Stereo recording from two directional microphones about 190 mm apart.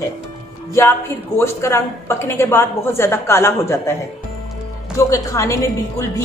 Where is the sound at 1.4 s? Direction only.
15° left (ahead or behind).